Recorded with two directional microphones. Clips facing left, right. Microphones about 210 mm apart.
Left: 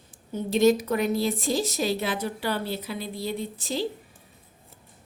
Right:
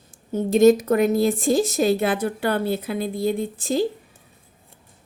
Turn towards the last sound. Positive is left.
turn(degrees=-45)  # may be behind; listen again after turning